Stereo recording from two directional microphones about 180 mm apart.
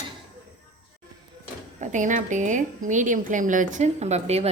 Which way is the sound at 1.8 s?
45° right (ahead or behind).